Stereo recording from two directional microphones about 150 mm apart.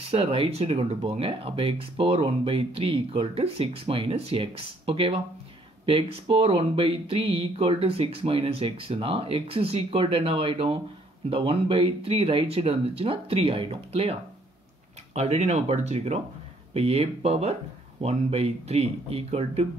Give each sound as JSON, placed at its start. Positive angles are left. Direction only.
{"t": 0.0, "sound": "speech", "side_deg": -40}
{"t": 15.1, "sound": "speech", "side_deg": -45}